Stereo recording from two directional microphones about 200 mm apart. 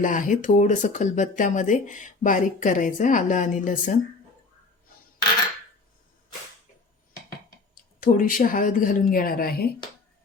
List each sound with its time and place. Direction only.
0.0 s speech: 40° left (ahead or behind)
8.0 s speech: 45° left (ahead or behind)